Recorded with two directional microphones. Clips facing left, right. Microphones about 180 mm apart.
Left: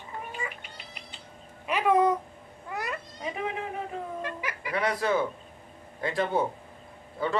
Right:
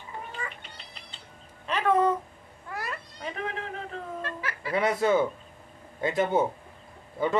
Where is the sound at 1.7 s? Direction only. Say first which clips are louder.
Left 1 dB; 10° left (ahead or behind).